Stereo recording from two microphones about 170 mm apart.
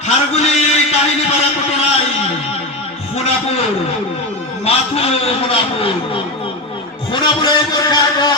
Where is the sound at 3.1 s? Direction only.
35° left (ahead or behind).